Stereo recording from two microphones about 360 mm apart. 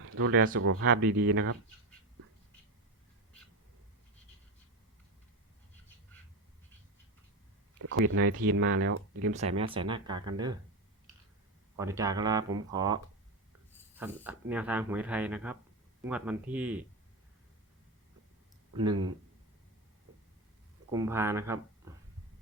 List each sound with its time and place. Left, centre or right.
0.0 s speech: right
7.8 s speech: right
9.3 s speech: centre
11.8 s speech: centre
20.9 s speech: centre